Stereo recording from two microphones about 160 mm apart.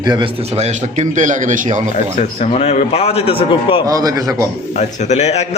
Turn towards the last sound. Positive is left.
turn(degrees=45)  # may be behind; listen again after turning